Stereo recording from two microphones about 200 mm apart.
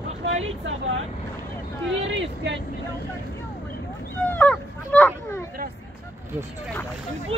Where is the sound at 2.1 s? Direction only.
65° right (ahead or behind).